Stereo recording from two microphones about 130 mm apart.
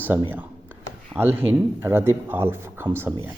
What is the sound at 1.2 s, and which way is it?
A man's voice, 15° right (ahead or behind).